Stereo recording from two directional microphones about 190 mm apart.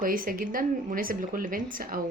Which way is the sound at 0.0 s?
50° right (ahead or behind).